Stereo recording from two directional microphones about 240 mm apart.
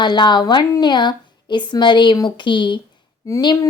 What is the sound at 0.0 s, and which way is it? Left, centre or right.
A woman's voice, centre.